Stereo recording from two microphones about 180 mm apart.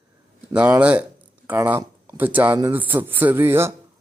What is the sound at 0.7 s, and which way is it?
Speech, 5° right (ahead or behind).